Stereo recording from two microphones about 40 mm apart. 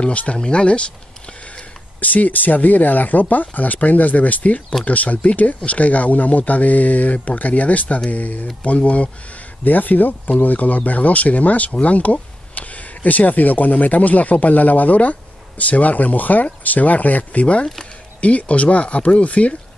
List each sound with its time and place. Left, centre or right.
0.0 s speech: left
2.0 s speech: left
9.7 s speech: left